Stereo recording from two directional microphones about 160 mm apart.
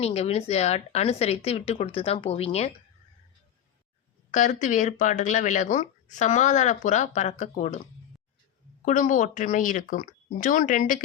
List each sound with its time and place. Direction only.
0.0 s speech: 40° left (ahead or behind)
4.3 s speech: 55° left (ahead or behind)
8.8 s speech: 55° left (ahead or behind)